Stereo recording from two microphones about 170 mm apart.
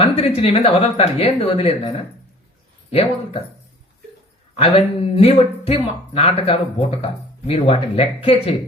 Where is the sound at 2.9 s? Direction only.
35° left (ahead or behind).